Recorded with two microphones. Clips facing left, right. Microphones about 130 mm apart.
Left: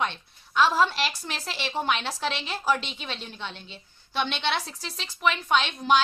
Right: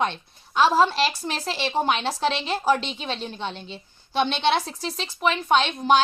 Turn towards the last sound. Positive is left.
turn(degrees=-40)  # may be behind; listen again after turning